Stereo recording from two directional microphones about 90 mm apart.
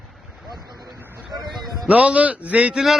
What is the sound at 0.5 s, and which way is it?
Vehicle, centre (ahead or behind).